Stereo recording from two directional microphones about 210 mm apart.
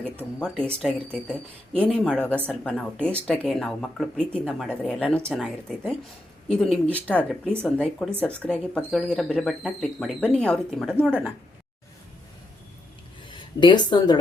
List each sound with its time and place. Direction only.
0.3 s speech: 5° left (ahead or behind)
13.3 s speech: 20° left (ahead or behind)